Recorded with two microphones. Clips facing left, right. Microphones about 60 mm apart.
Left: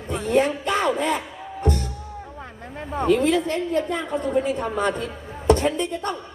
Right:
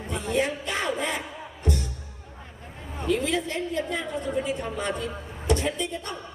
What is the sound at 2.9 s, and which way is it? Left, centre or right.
A woman's voice, left.